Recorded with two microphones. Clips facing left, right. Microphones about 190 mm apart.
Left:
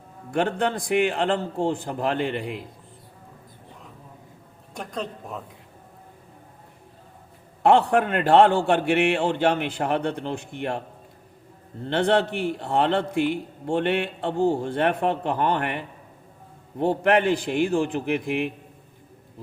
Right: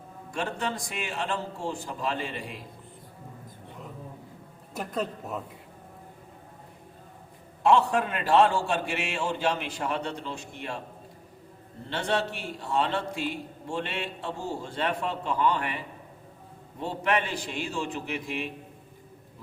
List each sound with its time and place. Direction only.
0.3 s a man's voice: 60° left (ahead or behind)
4.7 s speech: 5° right (ahead or behind)
7.6 s a man's voice: 60° left (ahead or behind)
11.9 s a man's voice: 60° left (ahead or behind)